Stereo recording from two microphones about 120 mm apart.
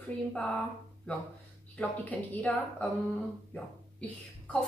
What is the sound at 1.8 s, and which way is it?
A woman's voice, 10° left (ahead or behind).